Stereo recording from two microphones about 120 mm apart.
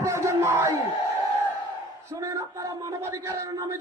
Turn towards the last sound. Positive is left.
turn(degrees=-25)  # may be behind; listen again after turning